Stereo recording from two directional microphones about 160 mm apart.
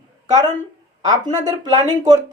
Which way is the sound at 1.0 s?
25° right (ahead or behind).